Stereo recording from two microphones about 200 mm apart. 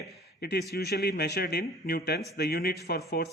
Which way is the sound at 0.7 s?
55° left (ahead or behind).